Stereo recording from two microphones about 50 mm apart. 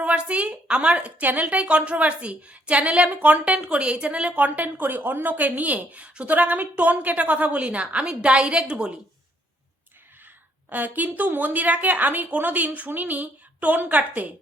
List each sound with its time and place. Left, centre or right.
0.0 s a woman's voice: right
10.7 s a woman's voice: right